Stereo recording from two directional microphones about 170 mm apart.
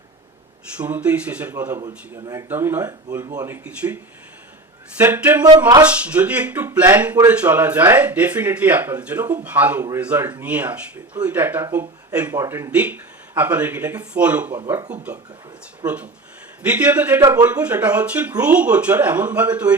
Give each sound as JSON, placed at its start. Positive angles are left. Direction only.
{"t": 0.8, "sound": "speech", "side_deg": -10}
{"t": 15.8, "sound": "speech", "side_deg": -25}
{"t": 16.6, "sound": "speech", "side_deg": -10}